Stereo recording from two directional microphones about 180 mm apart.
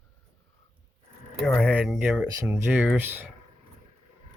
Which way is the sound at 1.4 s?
5° left (ahead or behind).